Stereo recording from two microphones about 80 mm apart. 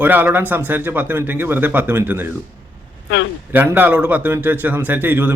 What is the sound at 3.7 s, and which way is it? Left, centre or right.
Speech, right.